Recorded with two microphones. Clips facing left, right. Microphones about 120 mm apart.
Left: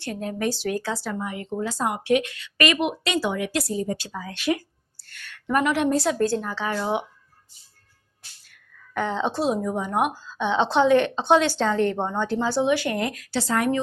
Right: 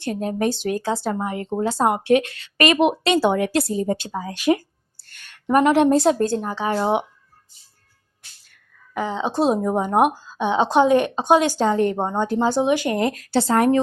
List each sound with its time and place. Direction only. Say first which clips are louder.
0.0 s speech: right 5 dB; 25° right (ahead or behind)
1.1 s speech: right 5 dB; 40° right (ahead or behind)
3.3 s speech: right 6 dB; 40° right (ahead or behind)
3.6 s a woman's voice: right 4 dB; 30° right (ahead or behind)
6.7 s speech: right 6 dB; 35° right (ahead or behind)
8.9 s a woman's voice: right 1 dB; 5° right (ahead or behind)
9.5 s speech: right 5 dB; 35° right (ahead or behind)
10.1 s a woman's voice: right 3 dB; 15° right (ahead or behind); by 13.7 s 35° right (ahead or behind)